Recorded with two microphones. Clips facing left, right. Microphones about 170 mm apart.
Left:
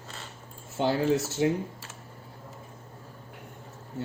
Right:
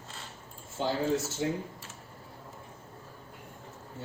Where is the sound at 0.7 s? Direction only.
70° left (ahead or behind).